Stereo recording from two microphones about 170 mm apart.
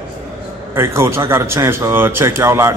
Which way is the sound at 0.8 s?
15° right (ahead or behind).